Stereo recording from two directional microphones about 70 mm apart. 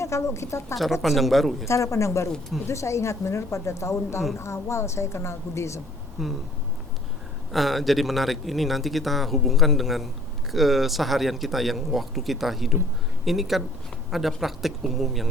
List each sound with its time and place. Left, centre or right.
0.0 s speech: left
1.0 s speech: centre
1.6 s speech: left
6.2 s speech: centre
7.5 s speech: centre